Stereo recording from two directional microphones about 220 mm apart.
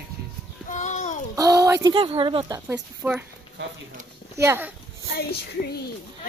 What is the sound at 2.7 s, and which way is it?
Speech, 10° right (ahead or behind).